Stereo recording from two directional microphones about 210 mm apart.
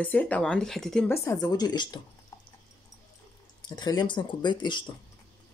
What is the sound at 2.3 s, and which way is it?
Dog, 10° left (ahead or behind).